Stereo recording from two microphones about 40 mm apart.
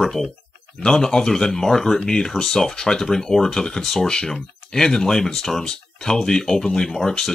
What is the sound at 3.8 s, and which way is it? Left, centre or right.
Speech, centre.